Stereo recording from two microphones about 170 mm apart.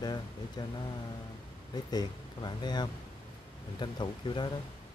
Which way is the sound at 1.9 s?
25° left (ahead or behind).